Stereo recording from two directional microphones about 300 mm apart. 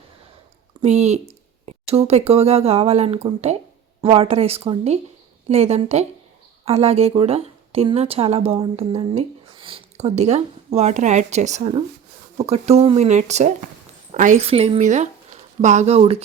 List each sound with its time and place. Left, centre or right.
0.8 s speech: right